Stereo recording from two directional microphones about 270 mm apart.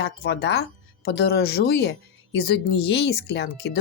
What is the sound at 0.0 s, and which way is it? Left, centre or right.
Speech, left.